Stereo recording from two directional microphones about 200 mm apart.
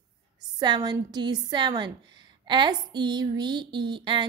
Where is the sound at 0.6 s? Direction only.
20° right (ahead or behind).